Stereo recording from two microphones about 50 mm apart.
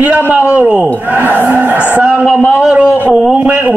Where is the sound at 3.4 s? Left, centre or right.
Right.